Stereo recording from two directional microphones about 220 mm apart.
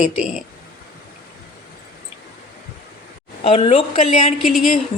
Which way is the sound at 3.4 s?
25° left (ahead or behind).